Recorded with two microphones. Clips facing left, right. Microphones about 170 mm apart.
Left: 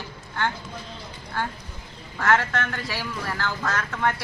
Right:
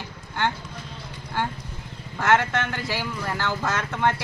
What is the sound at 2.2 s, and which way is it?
Speech, 20° right (ahead or behind).